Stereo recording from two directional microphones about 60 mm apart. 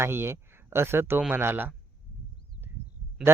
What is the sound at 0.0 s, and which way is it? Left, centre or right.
Speech, right.